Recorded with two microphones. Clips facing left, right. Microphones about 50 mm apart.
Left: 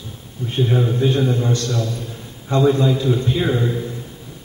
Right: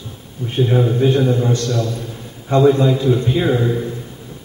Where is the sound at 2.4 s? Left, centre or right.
Centre.